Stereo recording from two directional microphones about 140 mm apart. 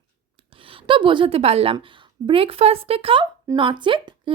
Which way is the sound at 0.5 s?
40° right (ahead or behind).